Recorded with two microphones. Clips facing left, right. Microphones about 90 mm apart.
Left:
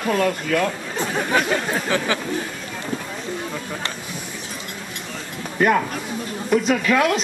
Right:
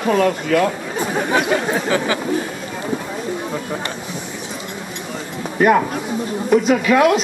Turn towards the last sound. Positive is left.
turn(degrees=-5)  # may be behind; listen again after turning